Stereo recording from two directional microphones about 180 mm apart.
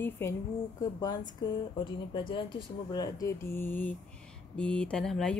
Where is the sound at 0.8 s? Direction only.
20° left (ahead or behind).